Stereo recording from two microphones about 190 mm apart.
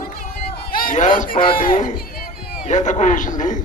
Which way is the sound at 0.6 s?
50° left (ahead or behind).